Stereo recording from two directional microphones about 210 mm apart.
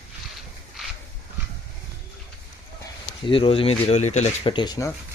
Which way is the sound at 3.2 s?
25° left (ahead or behind).